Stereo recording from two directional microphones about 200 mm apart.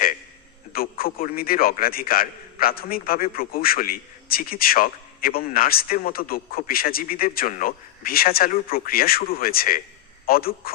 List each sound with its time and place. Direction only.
0.7 s a man's voice: 45° left (ahead or behind)